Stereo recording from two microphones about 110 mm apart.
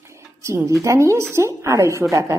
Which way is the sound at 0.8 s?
25° right (ahead or behind).